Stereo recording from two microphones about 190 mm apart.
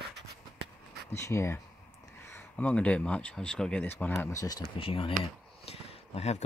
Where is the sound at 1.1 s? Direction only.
15° left (ahead or behind).